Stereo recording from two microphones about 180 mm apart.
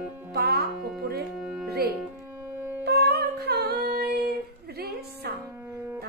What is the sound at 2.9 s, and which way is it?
Humming, 60° right (ahead or behind).